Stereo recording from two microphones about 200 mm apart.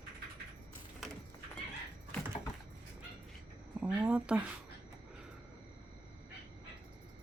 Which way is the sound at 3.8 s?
10° right (ahead or behind).